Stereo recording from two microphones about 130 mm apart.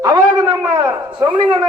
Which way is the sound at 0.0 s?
30° right (ahead or behind).